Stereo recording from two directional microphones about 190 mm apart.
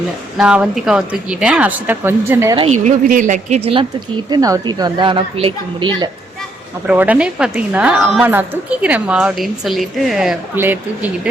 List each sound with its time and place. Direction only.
0.3 s a woman's voice: 5° right (ahead or behind)
2.6 s speech: 35° right (ahead or behind)
4.3 s speech: 20° right (ahead or behind)
6.8 s a woman's voice: 10° right (ahead or behind)